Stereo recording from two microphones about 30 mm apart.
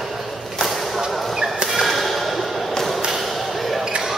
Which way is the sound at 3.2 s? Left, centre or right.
Centre.